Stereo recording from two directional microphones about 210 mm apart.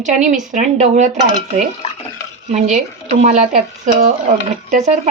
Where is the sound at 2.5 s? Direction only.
35° right (ahead or behind).